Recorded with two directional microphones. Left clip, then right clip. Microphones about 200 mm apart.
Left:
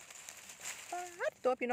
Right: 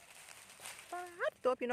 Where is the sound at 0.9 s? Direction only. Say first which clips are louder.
Even; 10° left (ahead or behind).